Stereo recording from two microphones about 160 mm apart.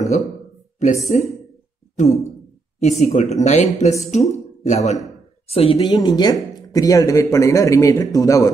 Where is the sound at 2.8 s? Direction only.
45° left (ahead or behind).